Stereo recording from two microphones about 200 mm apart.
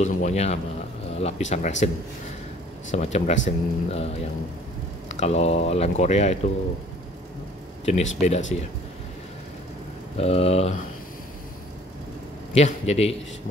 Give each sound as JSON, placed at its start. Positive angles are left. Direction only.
{"t": 0.0, "sound": "speech", "side_deg": 35}
{"t": 2.9, "sound": "speech", "side_deg": 35}
{"t": 7.8, "sound": "speech", "side_deg": 35}
{"t": 10.1, "sound": "speech", "side_deg": 30}
{"t": 12.5, "sound": "speech", "side_deg": 35}